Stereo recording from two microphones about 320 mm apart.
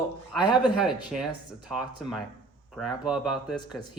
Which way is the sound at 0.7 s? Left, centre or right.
Centre.